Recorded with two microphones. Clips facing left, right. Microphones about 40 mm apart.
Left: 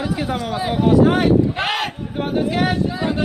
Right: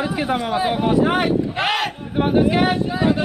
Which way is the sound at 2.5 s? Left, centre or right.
Right.